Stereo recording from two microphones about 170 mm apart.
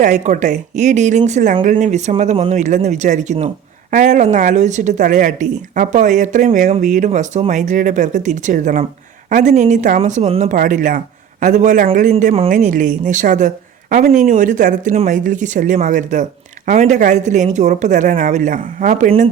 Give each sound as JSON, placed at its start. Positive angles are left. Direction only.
{"t": 0.0, "sound": "a woman's voice", "side_deg": -45}
{"t": 10.5, "sound": "a man's voice", "side_deg": -50}
{"t": 12.1, "sound": "a woman's voice", "side_deg": -35}
{"t": 12.5, "sound": "speech", "side_deg": -50}